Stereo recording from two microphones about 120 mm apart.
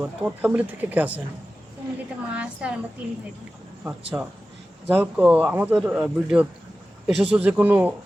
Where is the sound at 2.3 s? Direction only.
10° right (ahead or behind).